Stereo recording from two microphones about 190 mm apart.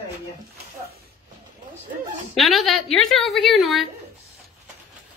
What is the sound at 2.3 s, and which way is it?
A woman's voice, centre (ahead or behind).